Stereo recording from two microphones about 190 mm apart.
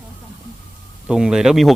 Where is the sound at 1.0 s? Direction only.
5° right (ahead or behind).